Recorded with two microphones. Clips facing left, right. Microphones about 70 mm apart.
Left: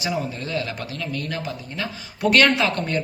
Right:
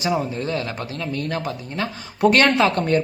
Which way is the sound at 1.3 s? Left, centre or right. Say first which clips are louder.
Right 3 dB; right.